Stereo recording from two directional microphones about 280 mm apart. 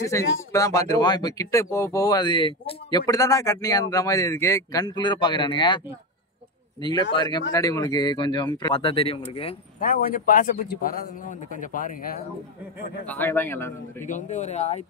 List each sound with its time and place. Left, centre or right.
0.1 s speech: centre
7.2 s speech: centre; by 12.3 s left
13.0 s speech: centre
14.0 s speech: left